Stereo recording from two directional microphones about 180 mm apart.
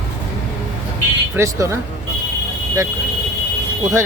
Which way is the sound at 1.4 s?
15° right (ahead or behind).